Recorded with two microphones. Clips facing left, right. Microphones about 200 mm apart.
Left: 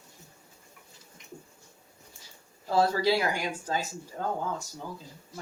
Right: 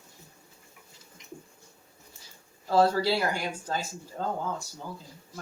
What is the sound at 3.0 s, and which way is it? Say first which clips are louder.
Speech: left 1 dB; 15° left (ahead or behind).